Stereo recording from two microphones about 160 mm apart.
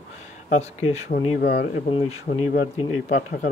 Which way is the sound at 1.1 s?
80° left.